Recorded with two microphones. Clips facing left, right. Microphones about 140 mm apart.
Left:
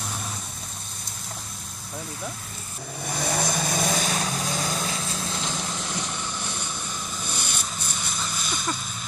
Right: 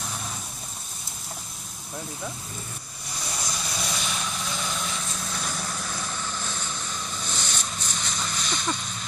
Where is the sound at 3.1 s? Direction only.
65° left (ahead or behind); by 8.7 s 5° left (ahead or behind).